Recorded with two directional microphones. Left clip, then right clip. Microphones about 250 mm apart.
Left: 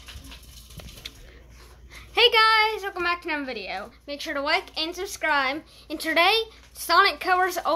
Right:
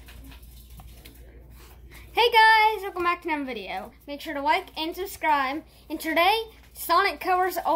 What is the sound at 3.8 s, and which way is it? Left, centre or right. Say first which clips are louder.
A woman's voice: left 3 dB; centre.